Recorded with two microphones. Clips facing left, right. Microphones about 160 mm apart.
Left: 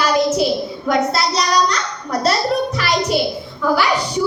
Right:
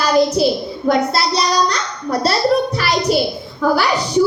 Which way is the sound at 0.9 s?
35° right (ahead or behind).